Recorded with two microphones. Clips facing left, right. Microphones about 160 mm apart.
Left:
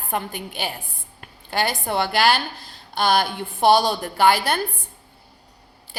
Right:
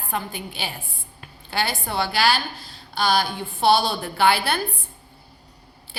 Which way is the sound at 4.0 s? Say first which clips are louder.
Left 2 dB; 45° left (ahead or behind).